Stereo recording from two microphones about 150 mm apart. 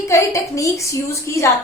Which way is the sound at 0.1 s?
20° left (ahead or behind).